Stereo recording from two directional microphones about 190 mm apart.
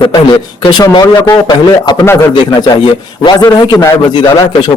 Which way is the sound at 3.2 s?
20° left (ahead or behind).